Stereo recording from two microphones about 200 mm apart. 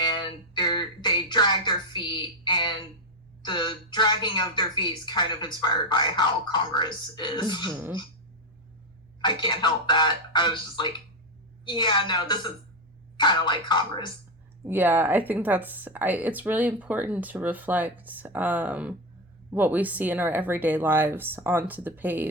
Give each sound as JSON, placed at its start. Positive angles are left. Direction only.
{"t": 0.1, "sound": "a sound", "side_deg": 20}
{"t": 3.4, "sound": "a woman's voice", "side_deg": 25}
{"t": 7.7, "sound": "a woman's voice", "side_deg": -10}
{"t": 9.2, "sound": "a woman's voice", "side_deg": 20}
{"t": 14.6, "sound": "a woman's voice", "side_deg": -10}